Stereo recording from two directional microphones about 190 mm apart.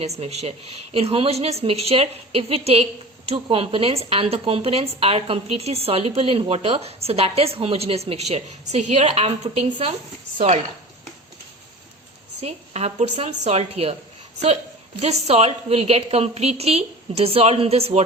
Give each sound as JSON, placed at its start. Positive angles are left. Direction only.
{"t": 0.2, "sound": "a woman's voice", "side_deg": -35}
{"t": 12.4, "sound": "a woman's voice", "side_deg": -35}